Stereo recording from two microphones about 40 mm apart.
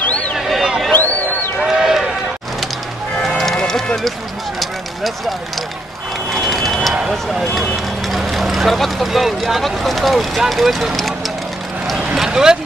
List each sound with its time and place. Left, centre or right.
0.4 s a sound: centre
1.6 s run: centre
3.2 s music: centre
6.3 s vehicle: centre
7.5 s speech: centre
12.2 s vehicle: centre